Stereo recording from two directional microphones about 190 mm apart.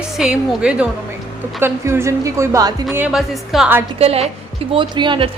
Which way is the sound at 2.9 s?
5° right (ahead or behind).